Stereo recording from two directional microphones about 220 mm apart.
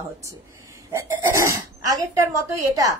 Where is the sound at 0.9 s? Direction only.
15° right (ahead or behind).